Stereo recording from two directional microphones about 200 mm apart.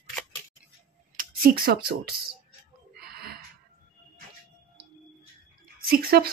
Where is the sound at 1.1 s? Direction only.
50° right (ahead or behind).